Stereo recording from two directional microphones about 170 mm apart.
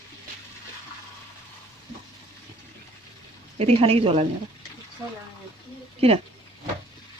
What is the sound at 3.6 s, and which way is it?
Speech, 35° right (ahead or behind).